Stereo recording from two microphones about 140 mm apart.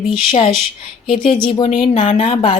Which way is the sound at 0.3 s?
40° left (ahead or behind).